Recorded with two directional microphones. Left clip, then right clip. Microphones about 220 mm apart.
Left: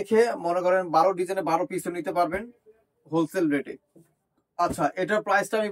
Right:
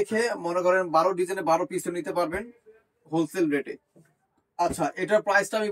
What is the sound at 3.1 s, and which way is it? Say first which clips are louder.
Speech: left 1 dB; 20° left (ahead or behind).